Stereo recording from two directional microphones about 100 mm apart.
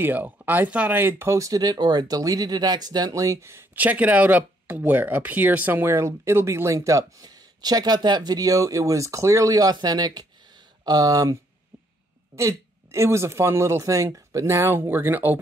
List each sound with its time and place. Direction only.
0.0 s speech: 20° right (ahead or behind)
3.7 s speech: 15° right (ahead or behind); by 11.3 s 35° right (ahead or behind)
12.4 s speech: 30° right (ahead or behind)